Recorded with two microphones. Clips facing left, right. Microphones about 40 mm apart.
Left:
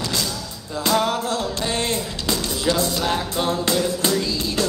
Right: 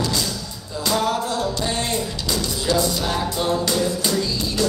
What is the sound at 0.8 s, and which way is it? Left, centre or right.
Music, left.